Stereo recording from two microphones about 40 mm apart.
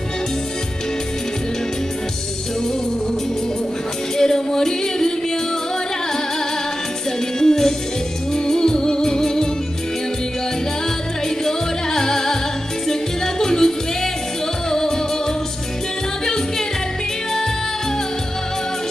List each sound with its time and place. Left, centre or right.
4.2 s singing: centre
7.3 s music: centre
11.2 s music: centre